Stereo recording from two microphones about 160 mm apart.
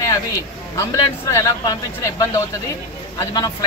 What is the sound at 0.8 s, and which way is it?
Speech, 20° left (ahead or behind).